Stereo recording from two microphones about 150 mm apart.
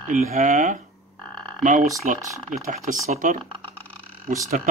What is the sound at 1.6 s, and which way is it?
Speech, 60° right (ahead or behind).